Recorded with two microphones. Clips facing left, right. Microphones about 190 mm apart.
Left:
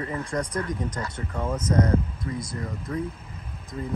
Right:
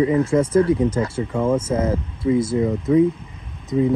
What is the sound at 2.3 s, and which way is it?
Speech, 90° right.